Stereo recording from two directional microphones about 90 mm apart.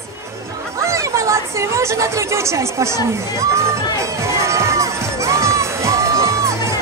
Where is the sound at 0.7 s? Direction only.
35° right (ahead or behind).